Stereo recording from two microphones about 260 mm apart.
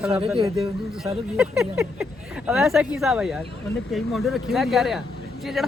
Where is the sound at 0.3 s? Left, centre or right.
Right.